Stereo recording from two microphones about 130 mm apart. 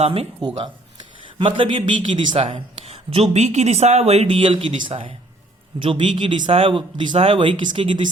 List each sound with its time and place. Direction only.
0.0 s speech: 50° right (ahead or behind)
0.3 s speech: 35° right (ahead or behind)
2.4 s speech: 50° right (ahead or behind)
4.4 s speech: 40° right (ahead or behind)